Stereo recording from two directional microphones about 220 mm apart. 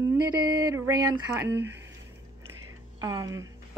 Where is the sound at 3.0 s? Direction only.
15° right (ahead or behind).